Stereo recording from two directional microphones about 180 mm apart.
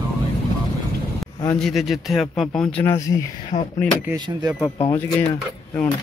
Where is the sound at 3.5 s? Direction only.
40° left (ahead or behind).